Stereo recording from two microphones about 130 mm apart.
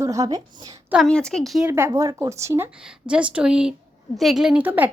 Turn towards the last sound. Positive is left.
turn(degrees=-15)  # may be behind; listen again after turning